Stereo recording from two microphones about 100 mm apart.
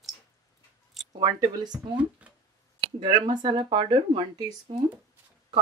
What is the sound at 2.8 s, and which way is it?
Speech, 50° right (ahead or behind).